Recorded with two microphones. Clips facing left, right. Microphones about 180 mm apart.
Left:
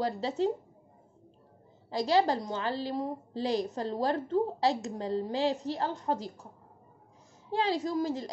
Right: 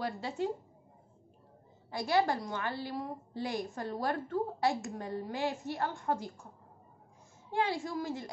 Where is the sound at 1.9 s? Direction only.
20° left (ahead or behind).